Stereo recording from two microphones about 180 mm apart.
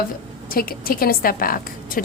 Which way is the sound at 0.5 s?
55° left (ahead or behind).